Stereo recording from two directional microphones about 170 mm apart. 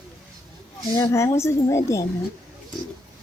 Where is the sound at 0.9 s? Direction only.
20° left (ahead or behind).